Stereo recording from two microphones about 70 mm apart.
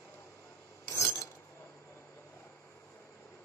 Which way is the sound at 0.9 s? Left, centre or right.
Left.